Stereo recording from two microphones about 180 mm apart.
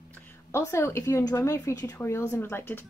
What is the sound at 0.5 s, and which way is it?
Speech, 15° left (ahead or behind).